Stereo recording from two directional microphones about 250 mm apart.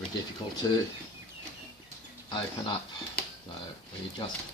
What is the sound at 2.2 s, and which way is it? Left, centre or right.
Speech, centre.